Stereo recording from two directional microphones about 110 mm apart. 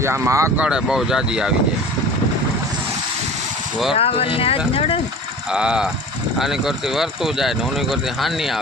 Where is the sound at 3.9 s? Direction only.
65° left (ahead or behind).